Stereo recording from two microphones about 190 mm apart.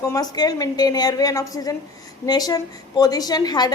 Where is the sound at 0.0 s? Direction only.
20° left (ahead or behind).